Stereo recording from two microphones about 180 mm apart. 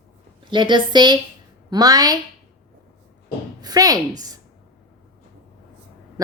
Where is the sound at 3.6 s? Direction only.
20° right (ahead or behind).